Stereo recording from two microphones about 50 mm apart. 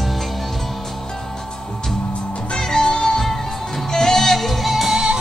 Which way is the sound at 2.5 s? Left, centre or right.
Centre.